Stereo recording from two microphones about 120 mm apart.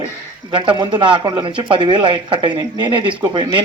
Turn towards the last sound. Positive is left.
turn(degrees=-40)  # may be behind; listen again after turning